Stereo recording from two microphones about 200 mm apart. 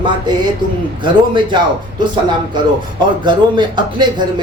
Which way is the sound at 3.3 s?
20° right (ahead or behind).